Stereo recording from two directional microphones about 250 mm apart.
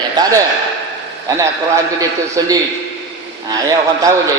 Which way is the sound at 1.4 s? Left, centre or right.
Centre.